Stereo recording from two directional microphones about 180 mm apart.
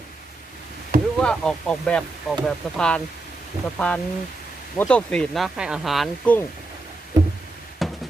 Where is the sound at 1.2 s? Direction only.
5° left (ahead or behind).